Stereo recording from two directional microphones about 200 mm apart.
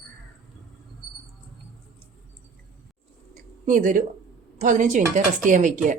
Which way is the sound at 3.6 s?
40° right (ahead or behind).